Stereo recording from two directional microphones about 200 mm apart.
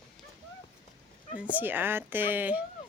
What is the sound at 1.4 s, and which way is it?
Speech, 10° right (ahead or behind).